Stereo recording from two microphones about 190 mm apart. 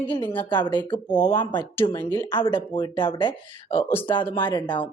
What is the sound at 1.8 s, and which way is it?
Speech, 25° left (ahead or behind).